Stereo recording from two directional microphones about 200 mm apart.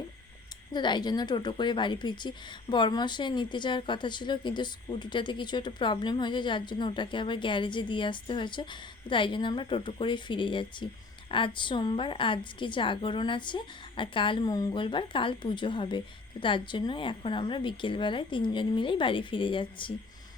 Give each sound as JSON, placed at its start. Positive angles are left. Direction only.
{"t": 0.7, "sound": "a woman's voice", "side_deg": 20}